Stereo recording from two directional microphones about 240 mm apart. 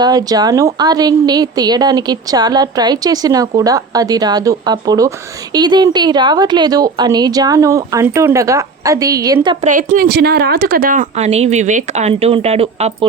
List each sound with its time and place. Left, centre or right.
0.0 s a woman's voice: centre
9.6 s a woman's voice: right